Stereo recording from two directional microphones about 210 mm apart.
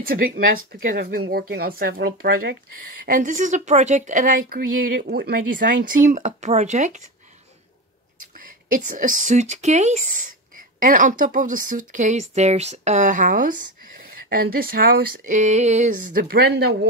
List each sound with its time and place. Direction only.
0.8 s speech: 45° right (ahead or behind)
8.7 s speech: 40° right (ahead or behind)